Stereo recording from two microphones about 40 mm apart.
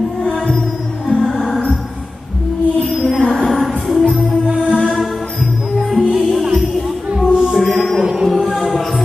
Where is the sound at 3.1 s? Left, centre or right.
Centre.